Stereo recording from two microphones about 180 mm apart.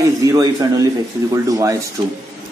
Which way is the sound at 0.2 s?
20° right (ahead or behind).